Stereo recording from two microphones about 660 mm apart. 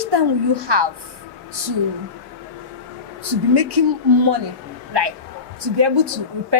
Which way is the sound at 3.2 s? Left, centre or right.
Right.